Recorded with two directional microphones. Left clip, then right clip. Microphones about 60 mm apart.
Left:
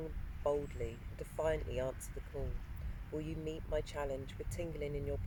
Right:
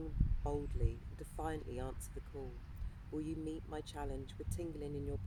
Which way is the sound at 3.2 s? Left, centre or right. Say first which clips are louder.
Even; right.